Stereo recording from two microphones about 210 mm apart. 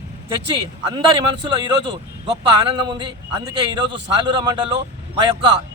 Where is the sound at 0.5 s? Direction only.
25° right (ahead or behind).